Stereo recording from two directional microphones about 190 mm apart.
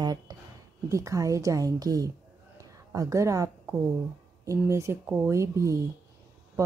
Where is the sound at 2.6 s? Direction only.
15° right (ahead or behind).